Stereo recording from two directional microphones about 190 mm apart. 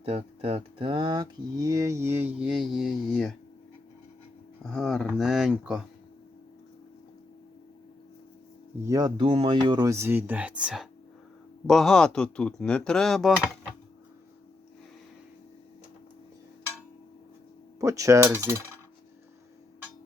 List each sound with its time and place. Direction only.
0.0 s speech: 30° right (ahead or behind); by 3.3 s centre (ahead or behind)
4.6 s speech: centre (ahead or behind)
8.8 s speech: 20° right (ahead or behind); by 13.5 s centre (ahead or behind)
17.7 s speech: 15° right (ahead or behind)